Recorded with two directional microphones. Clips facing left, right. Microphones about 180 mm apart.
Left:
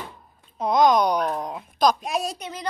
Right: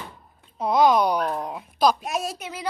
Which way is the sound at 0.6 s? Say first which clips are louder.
Even; 5° right (ahead or behind).